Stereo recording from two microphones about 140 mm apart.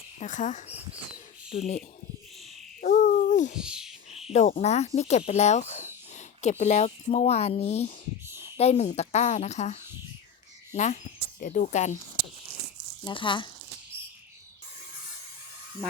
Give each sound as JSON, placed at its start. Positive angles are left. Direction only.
{"t": 0.2, "sound": "speech", "side_deg": 65}
{"t": 1.5, "sound": "speech", "side_deg": 50}
{"t": 2.8, "sound": "a sound", "side_deg": 85}
{"t": 3.6, "sound": "a sound", "side_deg": -5}
{"t": 4.3, "sound": "speech", "side_deg": 55}
{"t": 11.3, "sound": "speech", "side_deg": 70}
{"t": 13.1, "sound": "speech", "side_deg": 35}